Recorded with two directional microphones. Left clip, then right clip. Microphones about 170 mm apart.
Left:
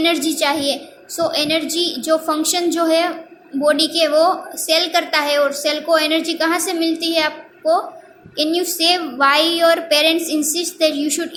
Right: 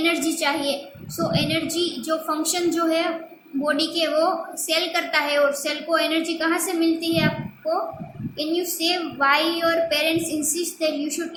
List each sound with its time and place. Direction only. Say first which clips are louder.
0.0 s a woman's voice: left 5 dB; 35° left (ahead or behind)
8.4 s a woman's voice: left 7 dB; 40° left (ahead or behind)